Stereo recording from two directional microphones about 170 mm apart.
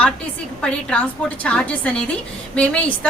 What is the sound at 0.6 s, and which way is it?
A woman's voice, 5° left (ahead or behind).